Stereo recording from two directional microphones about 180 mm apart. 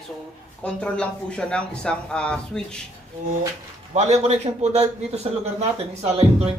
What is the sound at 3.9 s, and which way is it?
A man's voice, 40° right (ahead or behind).